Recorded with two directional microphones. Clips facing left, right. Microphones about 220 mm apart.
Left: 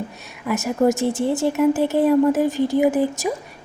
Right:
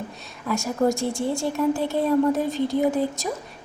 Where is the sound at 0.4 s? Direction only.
15° left (ahead or behind).